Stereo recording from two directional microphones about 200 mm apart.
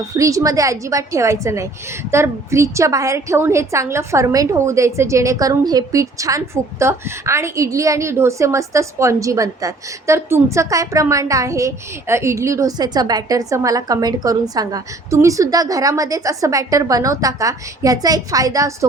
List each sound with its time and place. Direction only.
0.2 s a woman's voice: 15° right (ahead or behind)